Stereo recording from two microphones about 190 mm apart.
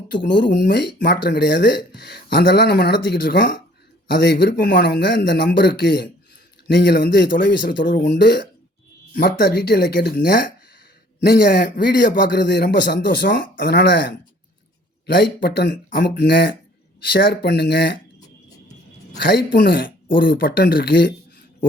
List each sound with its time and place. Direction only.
0.3 s speech: 65° left (ahead or behind)
9.1 s speech: 50° left (ahead or behind)
11.2 s speech: 60° left (ahead or behind)
15.9 s speech: 55° left (ahead or behind)
19.3 s speech: 50° left (ahead or behind)